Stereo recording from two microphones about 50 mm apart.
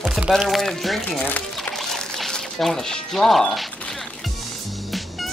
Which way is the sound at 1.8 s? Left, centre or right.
Centre.